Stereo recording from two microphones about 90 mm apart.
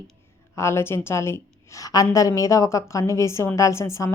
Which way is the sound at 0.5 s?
30° left (ahead or behind).